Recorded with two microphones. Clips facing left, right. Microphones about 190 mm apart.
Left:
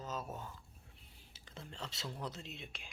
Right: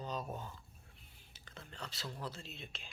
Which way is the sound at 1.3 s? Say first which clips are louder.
Left 2 dB; 25° left (ahead or behind).